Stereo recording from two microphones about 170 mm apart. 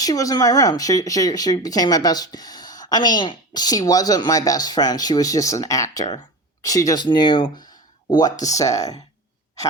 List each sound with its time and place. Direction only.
0.0 s speech: 20° left (ahead or behind)